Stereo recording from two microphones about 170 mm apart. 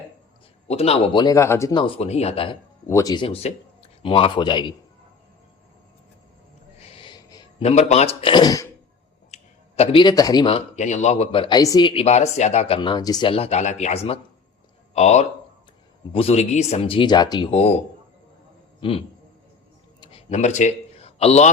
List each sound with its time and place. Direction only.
0.7 s speech: 35° left (ahead or behind); by 1.7 s 15° left (ahead or behind)
1.7 s speech: 35° left (ahead or behind)
2.8 s speech: 20° left (ahead or behind)
6.7 s owl: 35° left (ahead or behind)
7.6 s speech: 40° left (ahead or behind); by 8.6 s 25° left (ahead or behind)
9.3 s a sound: 35° left (ahead or behind)
10.4 s speech: 40° left (ahead or behind)
17.5 s speech: 35° left (ahead or behind)
18.8 s a man's voice: 30° left (ahead or behind)
20.0 s a sound: 35° left (ahead or behind)